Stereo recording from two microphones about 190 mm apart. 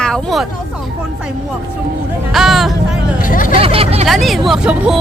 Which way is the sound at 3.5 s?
30° right (ahead or behind).